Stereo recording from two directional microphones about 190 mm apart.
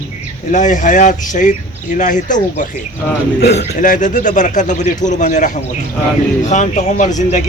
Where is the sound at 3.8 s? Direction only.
45° left (ahead or behind).